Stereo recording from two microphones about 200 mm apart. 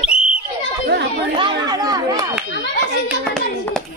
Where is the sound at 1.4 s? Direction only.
20° right (ahead or behind).